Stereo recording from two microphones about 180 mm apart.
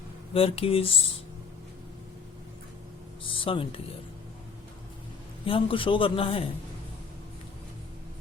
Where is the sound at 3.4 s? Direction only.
30° left (ahead or behind).